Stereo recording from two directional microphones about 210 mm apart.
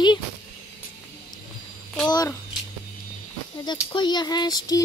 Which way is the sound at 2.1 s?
20° left (ahead or behind).